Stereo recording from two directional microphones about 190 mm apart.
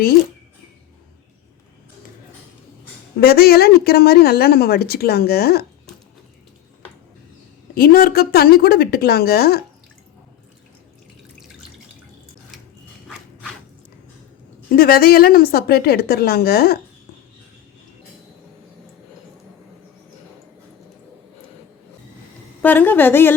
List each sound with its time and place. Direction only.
3.2 s speech: 55° left (ahead or behind)
7.8 s speech: 50° left (ahead or behind)
14.7 s a woman's voice: 50° left (ahead or behind)
22.6 s a woman's voice: 10° left (ahead or behind)